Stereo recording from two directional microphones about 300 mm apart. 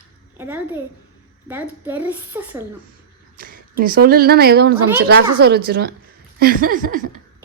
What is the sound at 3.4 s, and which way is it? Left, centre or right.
A woman's voice, right.